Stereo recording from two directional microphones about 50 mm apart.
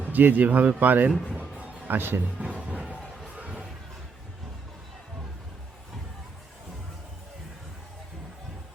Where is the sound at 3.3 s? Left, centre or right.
Right.